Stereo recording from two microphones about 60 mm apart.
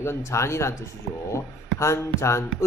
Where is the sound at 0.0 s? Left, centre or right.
Left.